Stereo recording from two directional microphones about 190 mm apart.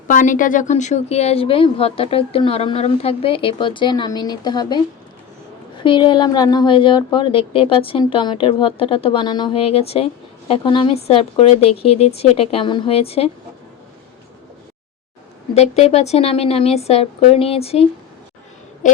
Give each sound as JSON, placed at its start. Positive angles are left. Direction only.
{"t": 0.1, "sound": "a woman's voice", "side_deg": 45}
{"t": 5.8, "sound": "a woman's voice", "side_deg": 25}
{"t": 15.5, "sound": "a woman's voice", "side_deg": 35}